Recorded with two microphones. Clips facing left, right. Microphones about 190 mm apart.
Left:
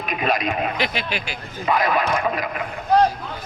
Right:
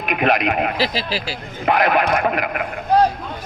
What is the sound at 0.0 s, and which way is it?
Speech, 60° right (ahead or behind).